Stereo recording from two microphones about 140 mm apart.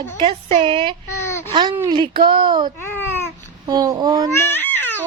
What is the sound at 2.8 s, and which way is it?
Babbling, 15° left (ahead or behind).